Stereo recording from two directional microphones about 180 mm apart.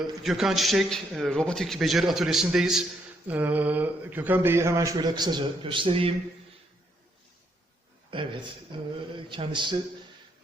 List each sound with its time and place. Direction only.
0.3 s a man's voice: centre (ahead or behind); by 6.1 s 30° right (ahead or behind)
8.1 s mantra: 30° right (ahead or behind)